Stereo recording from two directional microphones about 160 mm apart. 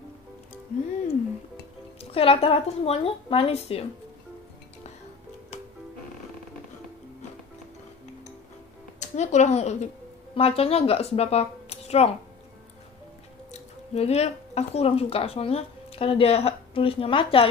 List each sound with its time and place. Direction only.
2.0 s a woman's voice: 35° left (ahead or behind)
9.1 s speech: 45° left (ahead or behind)
13.5 s speech: 40° left (ahead or behind)